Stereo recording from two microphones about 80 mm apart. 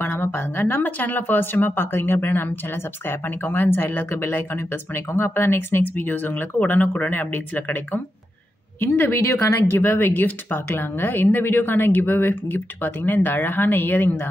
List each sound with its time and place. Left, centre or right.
0.0 s speech: left